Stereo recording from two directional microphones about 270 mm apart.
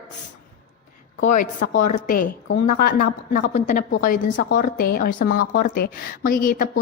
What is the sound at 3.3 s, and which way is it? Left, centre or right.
A woman's voice, left.